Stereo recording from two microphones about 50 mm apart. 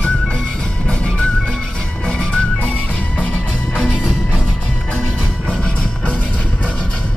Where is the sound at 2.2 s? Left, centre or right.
Centre.